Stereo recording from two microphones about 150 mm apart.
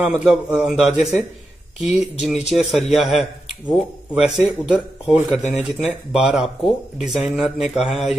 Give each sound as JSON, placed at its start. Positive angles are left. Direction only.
{"t": 0.0, "sound": "speech", "side_deg": 0}